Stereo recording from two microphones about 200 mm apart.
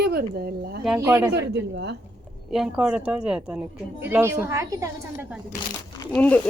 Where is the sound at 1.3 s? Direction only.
60° right (ahead or behind).